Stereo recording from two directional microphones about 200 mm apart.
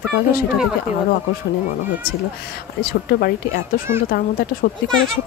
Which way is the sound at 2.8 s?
50° left (ahead or behind).